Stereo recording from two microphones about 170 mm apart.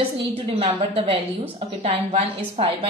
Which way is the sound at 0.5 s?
40° right (ahead or behind).